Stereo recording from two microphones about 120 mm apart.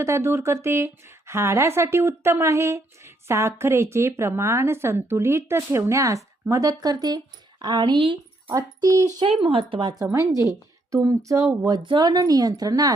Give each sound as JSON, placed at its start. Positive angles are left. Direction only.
{"t": 0.0, "sound": "a woman's voice", "side_deg": -25}
{"t": 8.5, "sound": "speech", "side_deg": -30}
{"t": 9.2, "sound": "speech", "side_deg": -50}
{"t": 11.9, "sound": "speech", "side_deg": -35}